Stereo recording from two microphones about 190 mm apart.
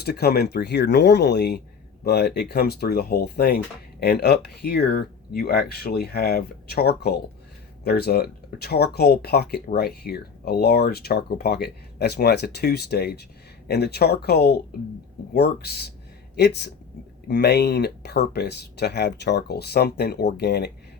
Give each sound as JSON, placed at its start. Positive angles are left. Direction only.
{"t": 0.0, "sound": "speech", "side_deg": 55}